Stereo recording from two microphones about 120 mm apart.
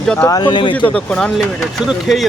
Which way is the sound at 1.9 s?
Centre (ahead or behind).